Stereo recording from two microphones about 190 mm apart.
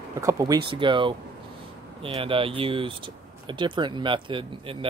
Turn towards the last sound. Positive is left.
turn(degrees=-25)  # may be behind; listen again after turning